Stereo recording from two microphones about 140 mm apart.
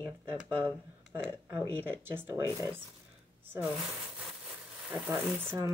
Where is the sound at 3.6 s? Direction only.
5° right (ahead or behind).